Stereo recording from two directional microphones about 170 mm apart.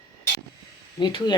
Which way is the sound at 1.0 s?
25° left (ahead or behind).